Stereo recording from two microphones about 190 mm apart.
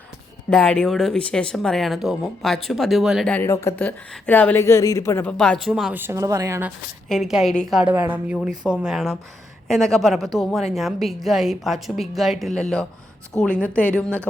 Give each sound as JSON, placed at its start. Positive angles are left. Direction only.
{"t": 0.5, "sound": "speech", "side_deg": 5}
{"t": 7.1, "sound": "speech", "side_deg": 0}